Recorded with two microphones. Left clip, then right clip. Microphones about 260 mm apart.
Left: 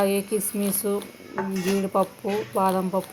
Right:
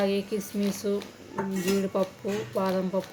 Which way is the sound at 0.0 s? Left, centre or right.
Centre.